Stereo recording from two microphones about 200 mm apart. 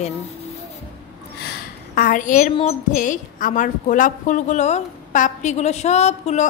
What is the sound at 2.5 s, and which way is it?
A woman's voice, 35° left (ahead or behind).